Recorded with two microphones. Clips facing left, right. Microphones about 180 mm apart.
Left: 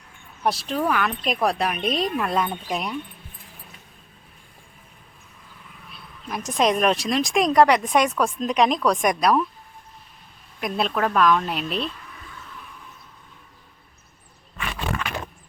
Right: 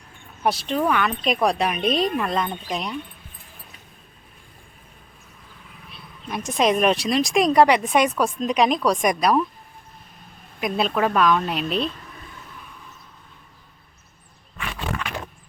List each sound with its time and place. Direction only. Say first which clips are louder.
0.4 s speech: right 2 dB; centre (ahead or behind)
5.9 s speech: right 1 dB; centre (ahead or behind)
10.6 s speech: right 2 dB; centre (ahead or behind)